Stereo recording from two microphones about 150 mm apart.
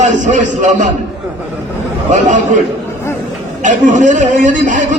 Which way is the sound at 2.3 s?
55° right (ahead or behind).